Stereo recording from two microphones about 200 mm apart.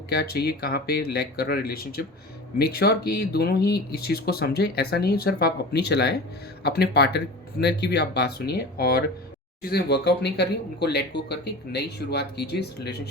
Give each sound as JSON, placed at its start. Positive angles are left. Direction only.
{"t": 0.1, "sound": "speech", "side_deg": 55}